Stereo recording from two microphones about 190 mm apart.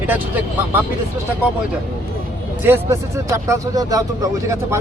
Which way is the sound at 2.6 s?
15° right (ahead or behind).